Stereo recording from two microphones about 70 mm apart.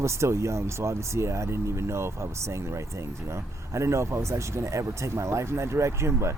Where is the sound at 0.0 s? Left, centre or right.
Right.